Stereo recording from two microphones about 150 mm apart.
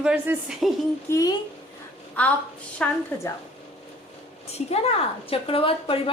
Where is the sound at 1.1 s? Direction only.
20° left (ahead or behind).